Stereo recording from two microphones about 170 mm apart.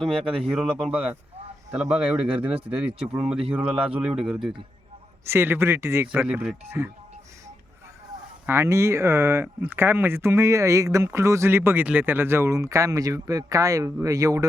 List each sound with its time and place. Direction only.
0.0 s speech: 5° right (ahead or behind)
5.2 s speech: 15° right (ahead or behind)
8.4 s speech: 15° right (ahead or behind)